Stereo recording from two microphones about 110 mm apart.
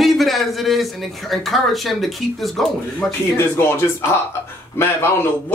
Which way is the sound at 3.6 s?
20° left (ahead or behind).